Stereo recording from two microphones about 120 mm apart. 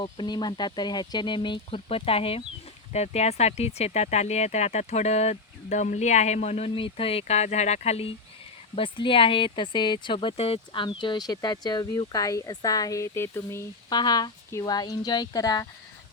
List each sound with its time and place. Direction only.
0.0 s speech: 40° left (ahead or behind)
2.9 s speech: 65° left (ahead or behind)
6.7 s speech: 50° left (ahead or behind)
8.7 s speech: 45° left (ahead or behind)
10.7 s speech: 40° left (ahead or behind); by 13.7 s 20° left (ahead or behind)
13.9 s speech: 35° left (ahead or behind)